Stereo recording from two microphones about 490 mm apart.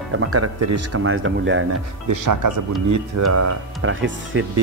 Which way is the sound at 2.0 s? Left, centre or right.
Right.